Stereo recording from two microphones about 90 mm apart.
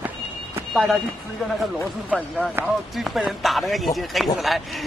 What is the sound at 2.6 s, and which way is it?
Speech, 25° right (ahead or behind).